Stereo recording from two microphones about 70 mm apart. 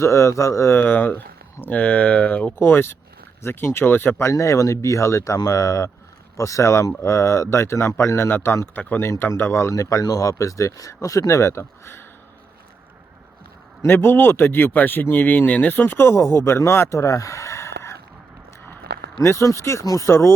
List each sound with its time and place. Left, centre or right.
0.0 s speech: left
0.8 s speech: left
2.6 s speech: left
4.3 s speech: left
13.8 s speech: left
19.2 s speech: left
19.8 s speech: left
20.1 s speech: left